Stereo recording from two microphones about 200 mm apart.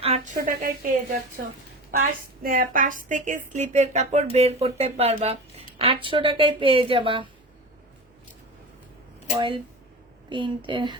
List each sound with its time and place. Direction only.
0.0 s a sound: 30° right (ahead or behind)
0.3 s a woman's voice: 45° right (ahead or behind); by 7.3 s 25° right (ahead or behind)
10.2 s speech: 25° right (ahead or behind)